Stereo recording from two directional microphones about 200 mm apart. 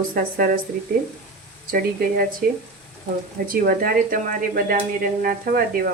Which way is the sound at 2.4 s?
40° right (ahead or behind).